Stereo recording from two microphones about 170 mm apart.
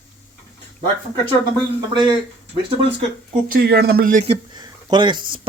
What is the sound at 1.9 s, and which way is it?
Speech, 30° right (ahead or behind).